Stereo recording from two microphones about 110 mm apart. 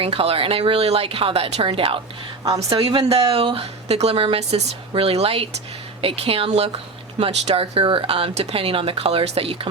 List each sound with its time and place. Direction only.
0.0 s speech: 60° right (ahead or behind)